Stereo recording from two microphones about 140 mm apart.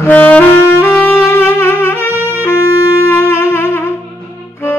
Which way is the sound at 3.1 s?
15° left (ahead or behind).